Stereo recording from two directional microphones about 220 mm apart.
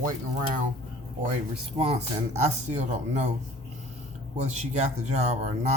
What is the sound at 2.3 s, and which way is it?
Speech, 30° right (ahead or behind).